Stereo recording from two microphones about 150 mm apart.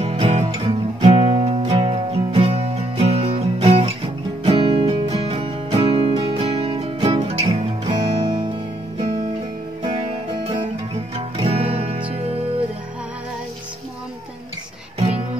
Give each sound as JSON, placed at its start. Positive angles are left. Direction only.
{"t": 0.0, "sound": "music", "side_deg": -45}
{"t": 9.8, "sound": "music", "side_deg": -40}